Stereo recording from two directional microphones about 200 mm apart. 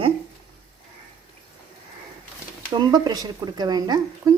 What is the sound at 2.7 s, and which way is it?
Speech, 20° right (ahead or behind).